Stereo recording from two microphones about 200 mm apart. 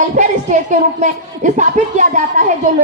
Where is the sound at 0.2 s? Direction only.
35° right (ahead or behind).